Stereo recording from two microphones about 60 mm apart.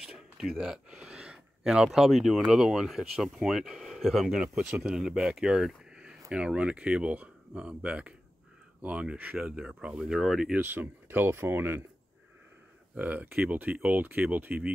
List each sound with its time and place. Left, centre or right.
0.0 s a sound: centre
2.4 s speech: centre
6.3 s speech: centre
10.6 s speech: right
12.9 s speech: right